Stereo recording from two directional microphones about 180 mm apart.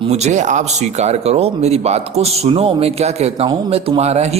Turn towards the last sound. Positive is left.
turn(degrees=-35)  # may be behind; listen again after turning